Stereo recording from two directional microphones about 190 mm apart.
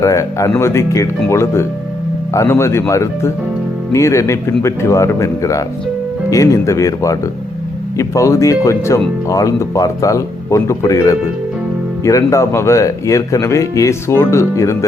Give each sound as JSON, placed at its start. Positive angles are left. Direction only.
{"t": 0.0, "sound": "speech", "side_deg": 15}